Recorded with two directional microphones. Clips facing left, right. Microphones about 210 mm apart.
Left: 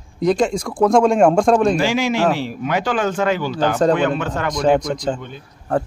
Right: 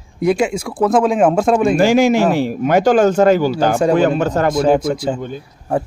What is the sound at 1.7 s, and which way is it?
A man's voice, 45° right (ahead or behind).